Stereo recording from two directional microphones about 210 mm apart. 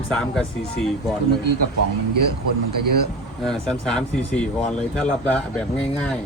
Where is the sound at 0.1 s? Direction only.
5° left (ahead or behind).